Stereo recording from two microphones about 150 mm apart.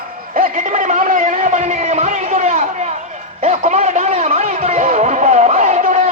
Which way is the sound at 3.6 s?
50° right (ahead or behind).